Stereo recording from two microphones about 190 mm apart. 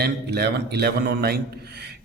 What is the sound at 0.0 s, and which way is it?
A man's voice, 60° right (ahead or behind).